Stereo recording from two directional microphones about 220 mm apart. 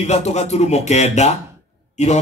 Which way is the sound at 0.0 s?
30° left (ahead or behind).